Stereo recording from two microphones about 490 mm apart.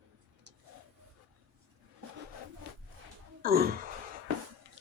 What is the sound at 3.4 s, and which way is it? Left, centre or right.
Gasp, centre.